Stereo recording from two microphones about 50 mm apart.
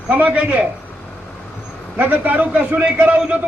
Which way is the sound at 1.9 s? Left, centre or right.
Right.